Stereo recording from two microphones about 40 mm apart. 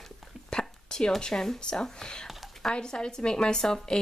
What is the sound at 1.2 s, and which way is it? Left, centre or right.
Speech, centre.